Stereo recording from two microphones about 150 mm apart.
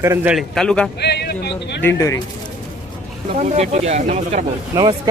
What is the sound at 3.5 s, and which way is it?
Speech, 45° right (ahead or behind).